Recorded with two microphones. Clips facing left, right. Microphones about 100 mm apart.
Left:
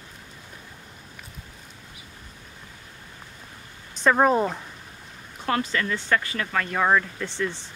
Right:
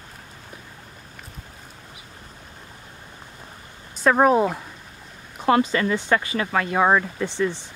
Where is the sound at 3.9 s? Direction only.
5° right (ahead or behind).